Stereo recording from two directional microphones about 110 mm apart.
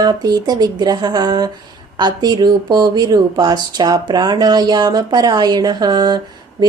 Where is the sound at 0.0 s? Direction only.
40° right (ahead or behind).